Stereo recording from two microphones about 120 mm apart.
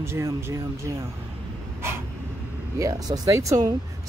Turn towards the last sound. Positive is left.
turn(degrees=-25)  # may be behind; listen again after turning